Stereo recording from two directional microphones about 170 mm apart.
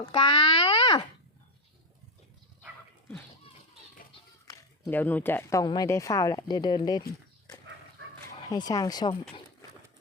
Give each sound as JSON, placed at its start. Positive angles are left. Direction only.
{"t": 0.0, "sound": "a sound", "side_deg": 30}
{"t": 4.9, "sound": "speech", "side_deg": 10}
{"t": 8.4, "sound": "speech", "side_deg": 20}